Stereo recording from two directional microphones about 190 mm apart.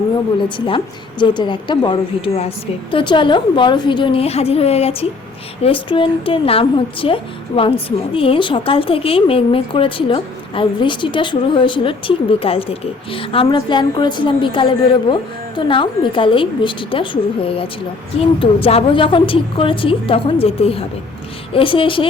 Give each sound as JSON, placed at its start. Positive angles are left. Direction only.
{"t": 1.2, "sound": "a woman's voice", "side_deg": 25}